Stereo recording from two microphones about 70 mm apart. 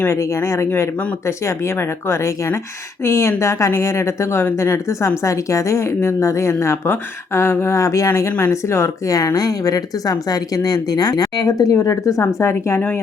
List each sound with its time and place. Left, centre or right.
0.0 s speech: left
9.1 s speech: left